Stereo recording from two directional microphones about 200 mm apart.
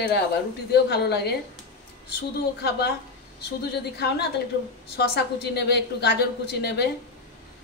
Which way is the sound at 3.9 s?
55° left (ahead or behind).